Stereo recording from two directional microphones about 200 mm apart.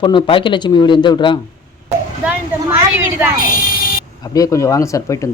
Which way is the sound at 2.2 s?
10° right (ahead or behind).